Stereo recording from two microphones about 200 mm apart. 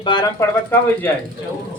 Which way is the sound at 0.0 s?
20° left (ahead or behind).